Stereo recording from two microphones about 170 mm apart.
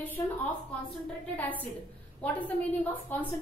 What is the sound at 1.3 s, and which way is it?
A woman's voice, 10° left (ahead or behind).